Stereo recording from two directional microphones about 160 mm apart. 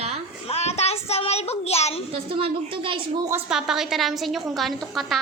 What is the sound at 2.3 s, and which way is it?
Speech, 35° right (ahead or behind).